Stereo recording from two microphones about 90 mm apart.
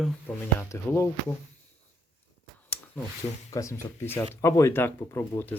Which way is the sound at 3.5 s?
35° left (ahead or behind).